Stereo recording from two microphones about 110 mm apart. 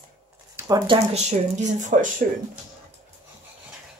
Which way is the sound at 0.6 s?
35° right (ahead or behind).